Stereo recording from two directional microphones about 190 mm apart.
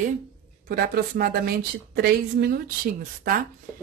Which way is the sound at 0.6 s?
55° right (ahead or behind).